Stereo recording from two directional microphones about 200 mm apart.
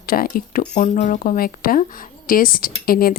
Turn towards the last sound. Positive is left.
turn(degrees=45)  # may be behind; listen again after turning